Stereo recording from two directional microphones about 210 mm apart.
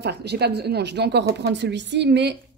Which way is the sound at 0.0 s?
50° right (ahead or behind).